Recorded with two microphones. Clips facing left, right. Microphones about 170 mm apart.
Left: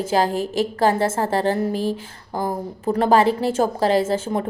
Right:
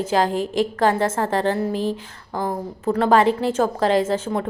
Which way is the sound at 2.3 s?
30° left (ahead or behind).